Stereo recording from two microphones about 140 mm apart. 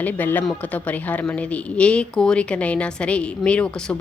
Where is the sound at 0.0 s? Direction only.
10° left (ahead or behind).